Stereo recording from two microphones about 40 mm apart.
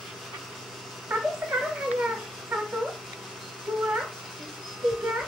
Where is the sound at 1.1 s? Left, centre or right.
Centre.